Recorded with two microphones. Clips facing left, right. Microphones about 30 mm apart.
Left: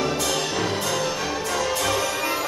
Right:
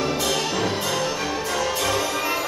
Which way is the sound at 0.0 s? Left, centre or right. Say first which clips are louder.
Right 1 dB; centre.